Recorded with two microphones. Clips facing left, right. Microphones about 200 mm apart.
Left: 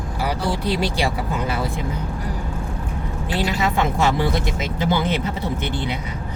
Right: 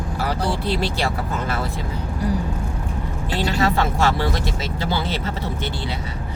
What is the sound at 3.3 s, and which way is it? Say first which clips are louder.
Speech: right 1 dB; 15° left (ahead or behind).